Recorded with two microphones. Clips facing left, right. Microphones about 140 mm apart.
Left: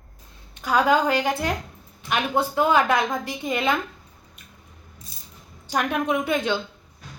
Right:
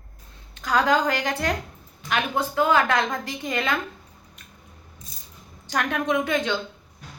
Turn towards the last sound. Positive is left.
turn(degrees=10)  # may be behind; listen again after turning